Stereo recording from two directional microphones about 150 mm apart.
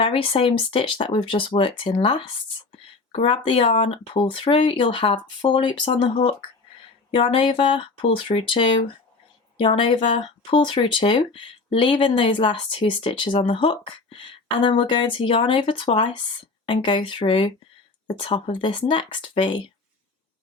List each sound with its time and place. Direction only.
0.0 s speech: 40° left (ahead or behind)